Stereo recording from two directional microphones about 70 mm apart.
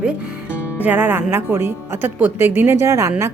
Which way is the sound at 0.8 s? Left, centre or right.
Right.